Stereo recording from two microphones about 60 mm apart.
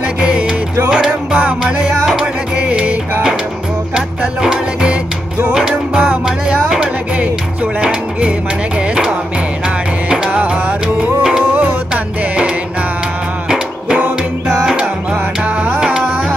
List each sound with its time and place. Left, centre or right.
0.2 s music: centre
10.3 s music: right